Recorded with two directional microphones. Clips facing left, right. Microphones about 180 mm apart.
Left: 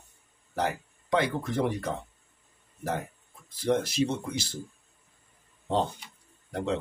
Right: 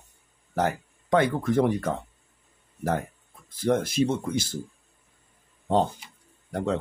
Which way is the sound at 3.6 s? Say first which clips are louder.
Right 3 dB; 50° right (ahead or behind).